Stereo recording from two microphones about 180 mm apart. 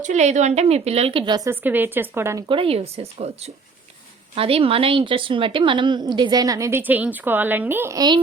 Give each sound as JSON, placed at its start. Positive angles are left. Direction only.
{"t": 0.0, "sound": "a woman's voice", "side_deg": -40}
{"t": 1.6, "sound": "speech", "side_deg": -10}
{"t": 2.5, "sound": "a woman's voice", "side_deg": -30}